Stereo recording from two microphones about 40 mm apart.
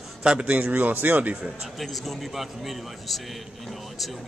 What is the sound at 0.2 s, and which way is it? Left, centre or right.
Speech, right.